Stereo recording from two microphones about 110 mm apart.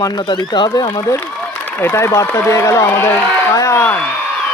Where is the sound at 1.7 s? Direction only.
20° left (ahead or behind).